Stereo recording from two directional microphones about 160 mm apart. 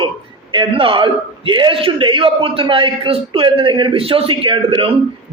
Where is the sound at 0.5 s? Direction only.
30° right (ahead or behind).